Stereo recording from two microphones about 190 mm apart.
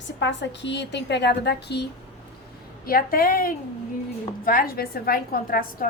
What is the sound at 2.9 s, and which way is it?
A woman's voice, 50° left (ahead or behind).